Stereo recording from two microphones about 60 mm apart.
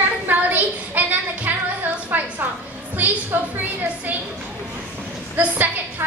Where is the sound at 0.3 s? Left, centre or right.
Right.